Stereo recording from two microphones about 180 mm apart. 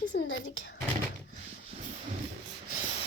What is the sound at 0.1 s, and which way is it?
Speech, 90° left.